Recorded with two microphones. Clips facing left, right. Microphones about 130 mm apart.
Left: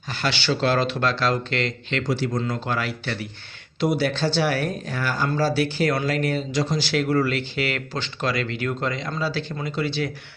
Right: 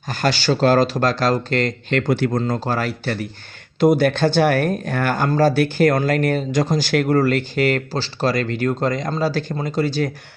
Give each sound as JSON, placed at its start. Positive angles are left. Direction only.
{"t": 0.1, "sound": "speech", "side_deg": -45}
{"t": 2.4, "sound": "speech", "side_deg": -40}